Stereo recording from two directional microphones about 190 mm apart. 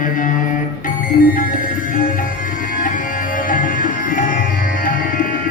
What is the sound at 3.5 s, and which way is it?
Music, 45° left (ahead or behind).